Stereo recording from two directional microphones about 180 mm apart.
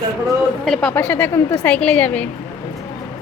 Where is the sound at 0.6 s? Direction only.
5° left (ahead or behind).